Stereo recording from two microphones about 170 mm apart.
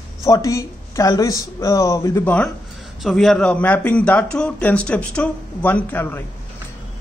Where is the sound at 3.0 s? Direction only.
Centre (ahead or behind).